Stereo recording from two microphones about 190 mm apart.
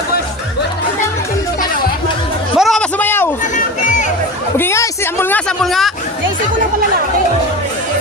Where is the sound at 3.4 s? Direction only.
40° left (ahead or behind).